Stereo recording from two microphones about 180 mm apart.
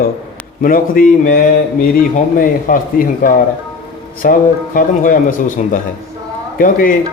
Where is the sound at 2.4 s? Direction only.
50° left (ahead or behind).